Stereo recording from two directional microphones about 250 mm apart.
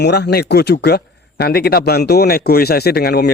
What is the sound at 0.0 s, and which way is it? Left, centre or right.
Speech, left.